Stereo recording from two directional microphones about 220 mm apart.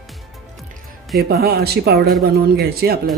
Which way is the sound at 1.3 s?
45° right (ahead or behind).